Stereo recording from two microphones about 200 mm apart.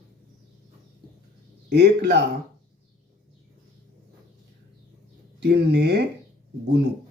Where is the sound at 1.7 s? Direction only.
60° right (ahead or behind).